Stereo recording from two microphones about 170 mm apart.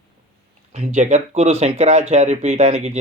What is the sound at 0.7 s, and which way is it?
Speech, 40° right (ahead or behind).